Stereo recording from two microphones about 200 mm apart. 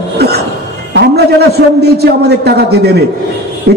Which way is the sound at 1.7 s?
55° right (ahead or behind).